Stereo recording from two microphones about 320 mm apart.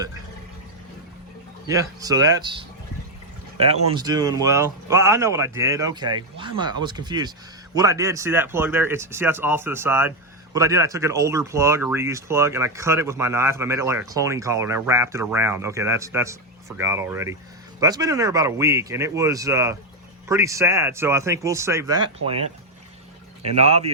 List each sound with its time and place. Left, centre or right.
1.6 s speech: centre
23.6 s speech: centre